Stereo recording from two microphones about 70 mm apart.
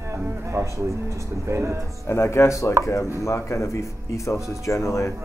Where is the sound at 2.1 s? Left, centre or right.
Left.